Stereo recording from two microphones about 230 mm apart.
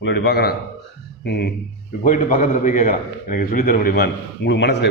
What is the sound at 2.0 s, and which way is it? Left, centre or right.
A man's voice, left.